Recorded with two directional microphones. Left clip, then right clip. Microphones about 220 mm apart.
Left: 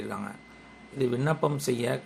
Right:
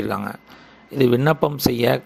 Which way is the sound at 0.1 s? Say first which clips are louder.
Right 11 dB; 40° right (ahead or behind).